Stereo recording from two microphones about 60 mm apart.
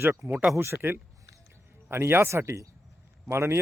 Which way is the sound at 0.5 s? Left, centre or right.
Right.